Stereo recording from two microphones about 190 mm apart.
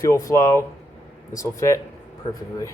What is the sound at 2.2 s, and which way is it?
Speech, 30° left (ahead or behind).